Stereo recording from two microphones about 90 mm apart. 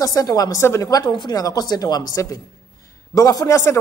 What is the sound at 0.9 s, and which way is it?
A woman's voice, 50° left (ahead or behind).